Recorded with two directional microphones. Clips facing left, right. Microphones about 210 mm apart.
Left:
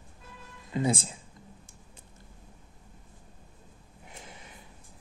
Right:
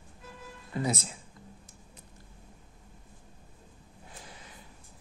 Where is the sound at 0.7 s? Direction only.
25° left (ahead or behind).